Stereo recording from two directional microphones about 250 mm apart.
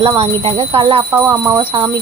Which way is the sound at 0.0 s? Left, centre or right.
Right.